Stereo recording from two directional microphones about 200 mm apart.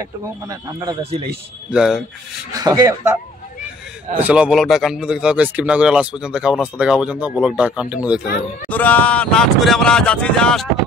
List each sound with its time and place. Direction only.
0.0 s speech: 15° right (ahead or behind)
1.7 s speech: centre (ahead or behind)
2.5 s speech: 20° right (ahead or behind)
4.2 s speech: 5° right (ahead or behind)
8.6 s speech: 10° left (ahead or behind)